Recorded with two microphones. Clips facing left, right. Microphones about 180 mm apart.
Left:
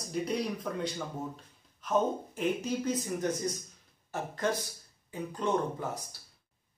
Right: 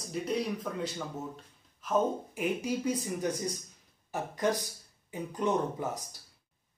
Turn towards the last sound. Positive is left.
turn(degrees=-15)  # may be behind; listen again after turning